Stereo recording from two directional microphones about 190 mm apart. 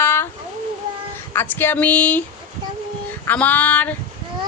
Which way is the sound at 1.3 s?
10° left (ahead or behind).